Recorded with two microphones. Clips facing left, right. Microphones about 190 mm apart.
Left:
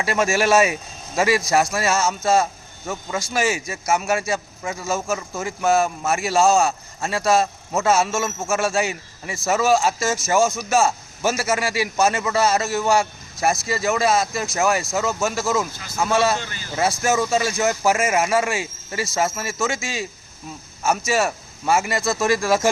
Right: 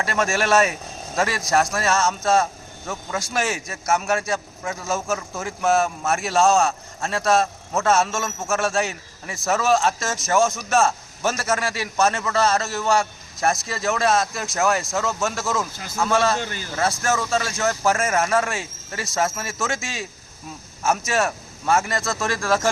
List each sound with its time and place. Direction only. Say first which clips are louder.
0.0 s a man's voice: left 3 dB; 10° left (ahead or behind)
16.4 s speech: right 5 dB; 50° right (ahead or behind)
17.0 s a man's voice: left 3 dB; 15° left (ahead or behind)